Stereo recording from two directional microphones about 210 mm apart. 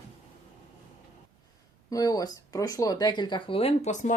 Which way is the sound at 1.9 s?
15° left (ahead or behind).